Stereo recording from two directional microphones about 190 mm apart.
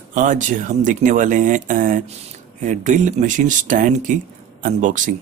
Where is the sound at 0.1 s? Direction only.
45° right (ahead or behind).